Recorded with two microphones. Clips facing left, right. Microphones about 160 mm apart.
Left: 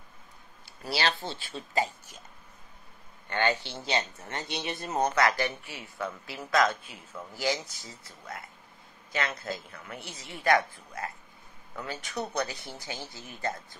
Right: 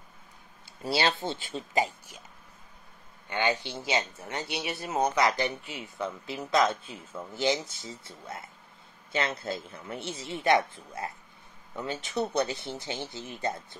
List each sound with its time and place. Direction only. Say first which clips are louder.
0.8 s speech: right 3 dB; 20° right (ahead or behind)
3.3 s speech: even; 15° right (ahead or behind)